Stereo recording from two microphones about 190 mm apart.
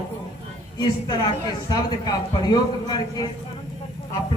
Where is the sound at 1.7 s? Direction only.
20° left (ahead or behind).